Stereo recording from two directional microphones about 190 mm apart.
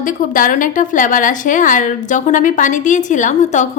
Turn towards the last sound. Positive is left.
turn(degrees=40)  # may be behind; listen again after turning